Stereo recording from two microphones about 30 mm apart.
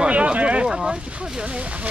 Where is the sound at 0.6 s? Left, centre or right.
Centre.